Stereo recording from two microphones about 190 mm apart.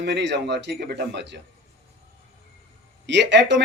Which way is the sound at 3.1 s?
65° right (ahead or behind).